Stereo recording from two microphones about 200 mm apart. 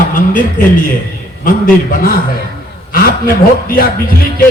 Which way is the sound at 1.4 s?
45° left (ahead or behind).